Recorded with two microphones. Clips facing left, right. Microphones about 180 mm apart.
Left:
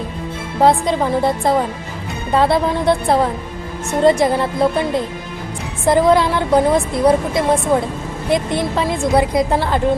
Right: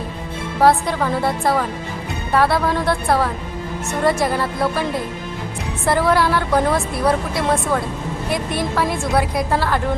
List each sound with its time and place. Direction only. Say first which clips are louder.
0.6 s a woman's voice: left 2 dB; 20° left (ahead or behind)
5.8 s a woman's voice: left 4 dB; 20° left (ahead or behind)